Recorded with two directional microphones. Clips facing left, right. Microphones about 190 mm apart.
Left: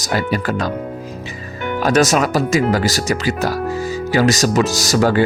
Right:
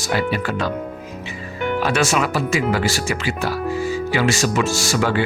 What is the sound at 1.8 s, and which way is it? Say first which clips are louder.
Speech: left 6 dB; 40° left (ahead or behind).